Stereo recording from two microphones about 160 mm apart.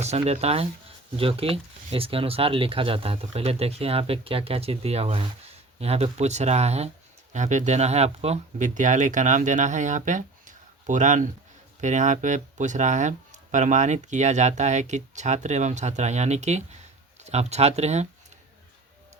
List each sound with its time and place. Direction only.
0.0 s speech: 45° right (ahead or behind)